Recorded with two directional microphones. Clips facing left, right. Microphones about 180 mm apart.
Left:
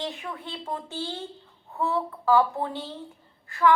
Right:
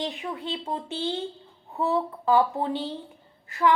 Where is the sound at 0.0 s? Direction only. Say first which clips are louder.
Right 3 dB; 20° right (ahead or behind).